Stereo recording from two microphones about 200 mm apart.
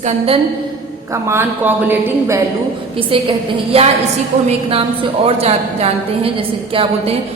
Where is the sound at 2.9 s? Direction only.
25° right (ahead or behind).